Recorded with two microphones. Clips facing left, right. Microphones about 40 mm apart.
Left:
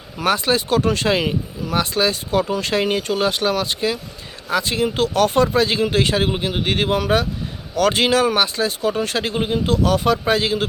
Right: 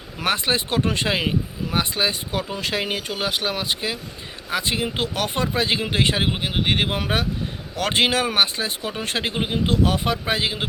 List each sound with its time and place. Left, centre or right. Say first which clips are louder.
0.2 s speech: left 4 dB; right
1.0 s speech: left 3 dB; centre
2.5 s speech: left 6 dB; centre